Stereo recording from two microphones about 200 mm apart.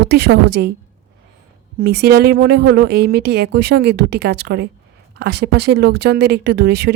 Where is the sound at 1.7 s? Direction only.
50° right (ahead or behind).